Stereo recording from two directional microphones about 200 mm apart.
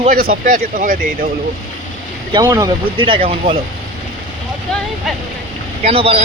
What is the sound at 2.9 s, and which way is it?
Speech, 25° right (ahead or behind).